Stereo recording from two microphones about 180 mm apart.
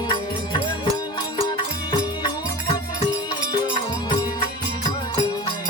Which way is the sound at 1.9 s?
25° left (ahead or behind).